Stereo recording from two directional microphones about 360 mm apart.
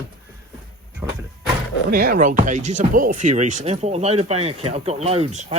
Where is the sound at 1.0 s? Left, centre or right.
Centre.